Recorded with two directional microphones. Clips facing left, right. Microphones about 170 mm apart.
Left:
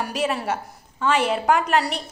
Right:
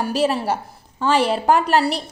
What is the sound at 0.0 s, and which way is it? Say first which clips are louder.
A woman's voice: right 5 dB; 35° right (ahead or behind).